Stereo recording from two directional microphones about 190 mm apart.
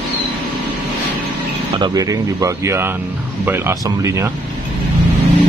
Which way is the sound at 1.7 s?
20° right (ahead or behind).